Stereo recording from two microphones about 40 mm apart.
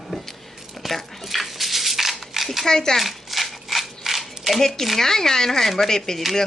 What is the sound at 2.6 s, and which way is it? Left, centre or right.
Speech, centre.